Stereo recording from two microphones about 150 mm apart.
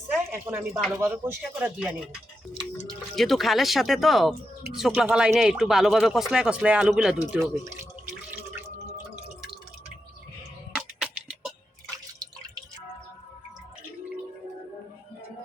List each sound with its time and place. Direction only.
0.3 s speech: 15° right (ahead or behind)
3.2 s speech: centre (ahead or behind)
10.8 s music: 5° right (ahead or behind)
12.2 s drip: 25° right (ahead or behind)